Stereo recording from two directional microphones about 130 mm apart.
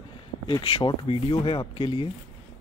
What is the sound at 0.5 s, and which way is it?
Speech, 45° left (ahead or behind).